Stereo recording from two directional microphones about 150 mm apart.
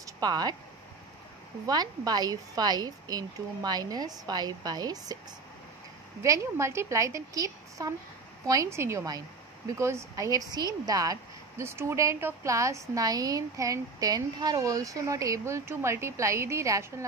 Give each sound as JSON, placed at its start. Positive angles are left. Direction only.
{"t": 0.0, "sound": "speech", "side_deg": -25}
{"t": 1.7, "sound": "a woman's voice", "side_deg": -25}
{"t": 6.2, "sound": "a woman's voice", "side_deg": -20}